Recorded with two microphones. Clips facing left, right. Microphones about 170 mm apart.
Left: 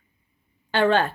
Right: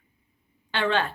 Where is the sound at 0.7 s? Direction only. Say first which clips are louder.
Left 5 dB; 45° left (ahead or behind).